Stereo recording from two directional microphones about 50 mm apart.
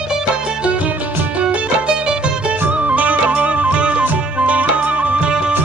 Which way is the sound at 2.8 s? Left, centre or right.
Right.